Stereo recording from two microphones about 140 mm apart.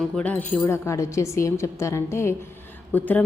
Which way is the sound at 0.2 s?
10° left (ahead or behind).